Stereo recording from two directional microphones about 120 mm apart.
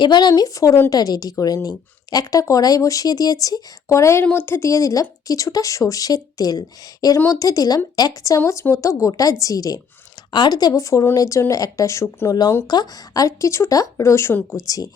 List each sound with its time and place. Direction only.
0.0 s speech: 35° left (ahead or behind)